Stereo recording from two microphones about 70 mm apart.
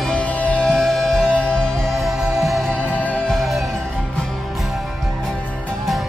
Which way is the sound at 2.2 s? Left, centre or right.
Centre.